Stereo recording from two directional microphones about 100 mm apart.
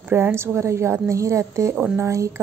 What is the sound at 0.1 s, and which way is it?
A woman's voice, 20° right (ahead or behind).